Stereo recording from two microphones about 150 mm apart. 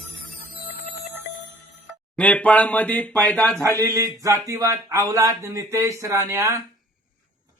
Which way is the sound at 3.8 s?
20° right (ahead or behind).